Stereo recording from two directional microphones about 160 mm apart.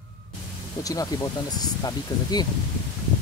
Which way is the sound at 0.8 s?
20° left (ahead or behind).